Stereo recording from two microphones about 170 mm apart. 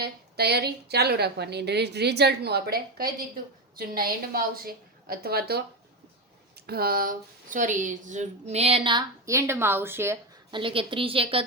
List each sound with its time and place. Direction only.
0.0 s a woman's voice: 70° right (ahead or behind)
6.7 s speech: 60° right (ahead or behind); by 10.2 s 15° right (ahead or behind)
10.5 s speech: 30° right (ahead or behind)